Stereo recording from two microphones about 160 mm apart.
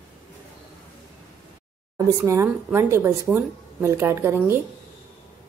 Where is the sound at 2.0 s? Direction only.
20° right (ahead or behind).